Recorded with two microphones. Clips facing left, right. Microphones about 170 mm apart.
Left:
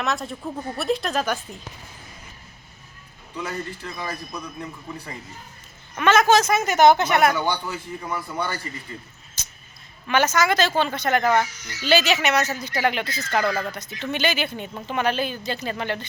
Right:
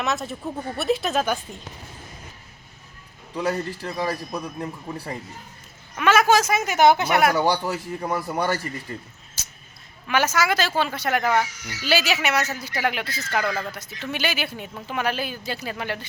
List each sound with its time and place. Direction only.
0.0 s speech: centre (ahead or behind)
3.3 s a man's voice: 35° right (ahead or behind)
6.0 s speech: 10° right (ahead or behind)
7.3 s a man's voice: 40° right (ahead or behind)
9.4 s a sound: 5° right (ahead or behind)
10.1 s speech: 5° right (ahead or behind)